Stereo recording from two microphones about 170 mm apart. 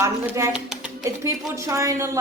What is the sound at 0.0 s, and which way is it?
A woman's voice, 15° right (ahead or behind).